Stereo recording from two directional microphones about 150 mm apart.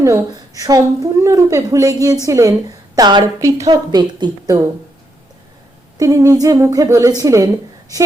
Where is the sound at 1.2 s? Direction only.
20° right (ahead or behind).